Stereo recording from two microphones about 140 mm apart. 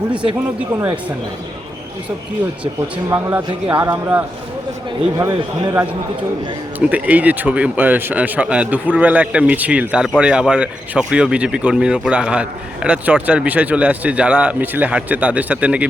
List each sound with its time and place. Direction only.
0.7 s a man's voice: 20° right (ahead or behind)
3.1 s a man's voice: 20° right (ahead or behind)
3.7 s a man's voice: 35° right (ahead or behind)
5.1 s a man's voice: 25° right (ahead or behind)
6.7 s speech: 10° right (ahead or behind)